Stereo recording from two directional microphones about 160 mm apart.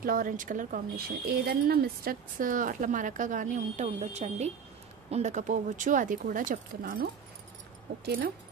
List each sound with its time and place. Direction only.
0.0 s speech: 60° right (ahead or behind)
7.9 s speech: 85° right